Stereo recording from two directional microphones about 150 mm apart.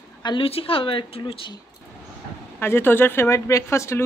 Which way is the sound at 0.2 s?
35° left (ahead or behind).